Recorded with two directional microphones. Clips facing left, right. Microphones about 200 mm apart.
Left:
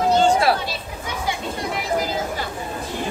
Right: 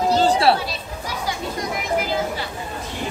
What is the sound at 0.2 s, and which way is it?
Chatter, 35° right (ahead or behind).